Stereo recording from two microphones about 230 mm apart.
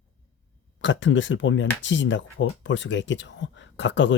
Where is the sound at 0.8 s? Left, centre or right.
Left.